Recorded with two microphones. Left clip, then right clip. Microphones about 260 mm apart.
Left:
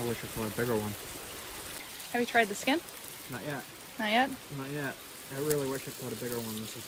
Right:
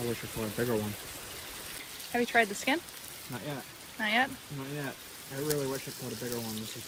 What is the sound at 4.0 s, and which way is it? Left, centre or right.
Speech, centre.